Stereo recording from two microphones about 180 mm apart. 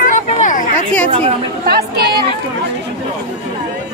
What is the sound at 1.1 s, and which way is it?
Speech, 35° right (ahead or behind).